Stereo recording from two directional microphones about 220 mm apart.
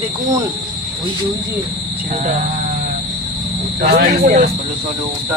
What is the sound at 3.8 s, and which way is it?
Speech, 45° right (ahead or behind).